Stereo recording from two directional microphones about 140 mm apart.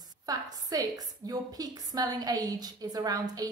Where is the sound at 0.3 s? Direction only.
25° right (ahead or behind).